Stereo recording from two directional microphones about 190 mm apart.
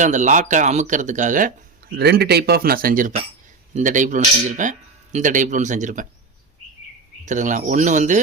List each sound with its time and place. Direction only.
0.0 s speech: 40° right (ahead or behind)
2.0 s speech: 60° right (ahead or behind); by 6.1 s 40° right (ahead or behind)
7.3 s speech: 40° right (ahead or behind)